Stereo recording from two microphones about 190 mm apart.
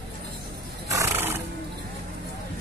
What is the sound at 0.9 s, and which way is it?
Music, 15° right (ahead or behind).